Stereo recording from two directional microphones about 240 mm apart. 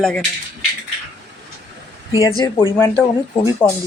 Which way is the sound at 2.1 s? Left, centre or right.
Centre.